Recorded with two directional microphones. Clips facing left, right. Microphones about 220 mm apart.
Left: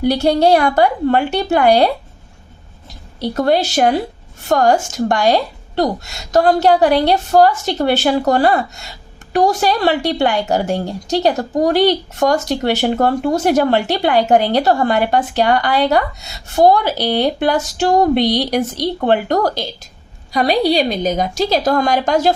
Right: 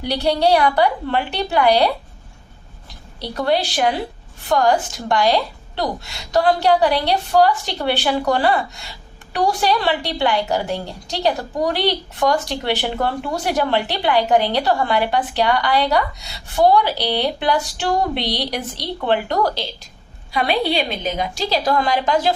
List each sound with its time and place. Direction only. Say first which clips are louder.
0.0 s a woman's voice: left 5 dB; 45° left (ahead or behind)
3.2 s a woman's voice: left 5 dB; 45° left (ahead or behind)